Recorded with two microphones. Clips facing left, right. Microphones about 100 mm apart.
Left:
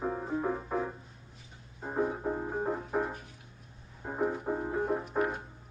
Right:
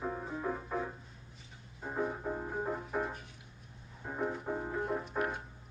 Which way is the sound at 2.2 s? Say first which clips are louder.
Left 4 dB; 25° left (ahead or behind).